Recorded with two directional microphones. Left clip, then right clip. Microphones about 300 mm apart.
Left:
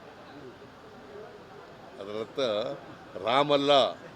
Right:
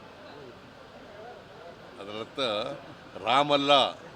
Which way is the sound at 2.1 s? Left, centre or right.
Centre.